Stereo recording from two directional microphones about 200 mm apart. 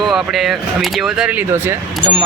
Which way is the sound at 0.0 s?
Centre (ahead or behind).